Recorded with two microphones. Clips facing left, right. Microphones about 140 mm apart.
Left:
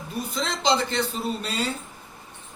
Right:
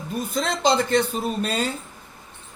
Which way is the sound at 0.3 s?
50° right (ahead or behind).